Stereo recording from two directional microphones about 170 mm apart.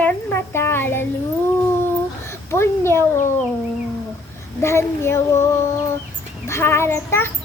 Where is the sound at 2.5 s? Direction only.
15° left (ahead or behind).